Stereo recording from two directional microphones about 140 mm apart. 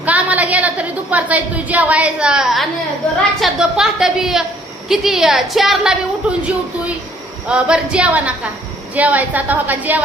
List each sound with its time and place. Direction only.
0.0 s a woman's voice: 10° right (ahead or behind)